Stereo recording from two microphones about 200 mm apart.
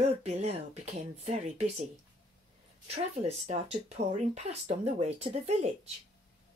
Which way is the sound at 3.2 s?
35° right (ahead or behind).